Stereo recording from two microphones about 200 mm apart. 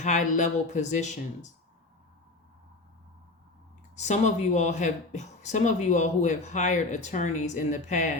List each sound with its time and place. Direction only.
0.0 s speech: 40° left (ahead or behind)
3.9 s speech: 35° left (ahead or behind)